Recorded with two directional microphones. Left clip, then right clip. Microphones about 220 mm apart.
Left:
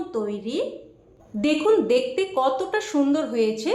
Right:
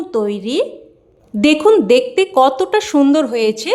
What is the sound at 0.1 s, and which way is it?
Speech, 45° right (ahead or behind).